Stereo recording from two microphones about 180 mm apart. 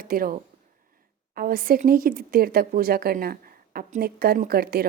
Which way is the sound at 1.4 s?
55° right (ahead or behind).